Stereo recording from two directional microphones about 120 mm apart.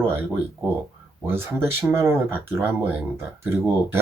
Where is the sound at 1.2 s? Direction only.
20° right (ahead or behind).